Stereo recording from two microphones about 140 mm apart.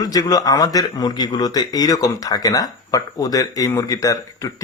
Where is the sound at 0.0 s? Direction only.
25° left (ahead or behind).